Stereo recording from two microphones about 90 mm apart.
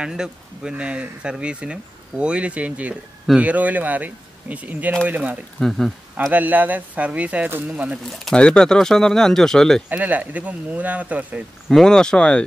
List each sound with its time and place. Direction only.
0.0 s speech: 10° right (ahead or behind)
5.6 s speech: centre (ahead or behind)
6.3 s speech: 20° right (ahead or behind)
8.1 s speech: 5° left (ahead or behind)
9.8 s speech: 15° right (ahead or behind)
11.7 s speech: 5° left (ahead or behind)